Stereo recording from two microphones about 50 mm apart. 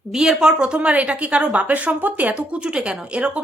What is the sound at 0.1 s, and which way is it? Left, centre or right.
A woman's voice, centre.